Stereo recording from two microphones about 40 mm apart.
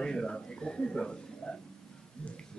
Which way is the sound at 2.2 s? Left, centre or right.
Centre.